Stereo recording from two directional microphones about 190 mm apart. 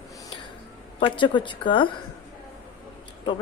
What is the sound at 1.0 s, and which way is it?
Speech, 25° left (ahead or behind).